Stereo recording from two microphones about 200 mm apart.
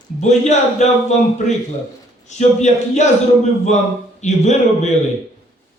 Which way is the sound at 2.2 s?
35° left (ahead or behind).